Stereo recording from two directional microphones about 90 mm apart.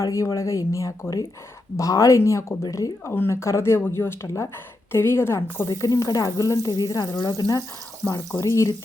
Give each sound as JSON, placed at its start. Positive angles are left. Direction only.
{"t": 0.0, "sound": "a woman's voice", "side_deg": 35}
{"t": 5.6, "sound": "speech", "side_deg": 40}
{"t": 8.3, "sound": "speech", "side_deg": 30}